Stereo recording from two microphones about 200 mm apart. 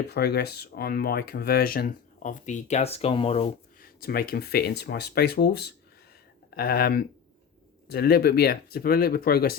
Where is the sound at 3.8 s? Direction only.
50° left (ahead or behind).